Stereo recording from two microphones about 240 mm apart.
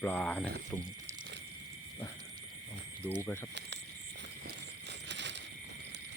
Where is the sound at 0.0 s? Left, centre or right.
Centre.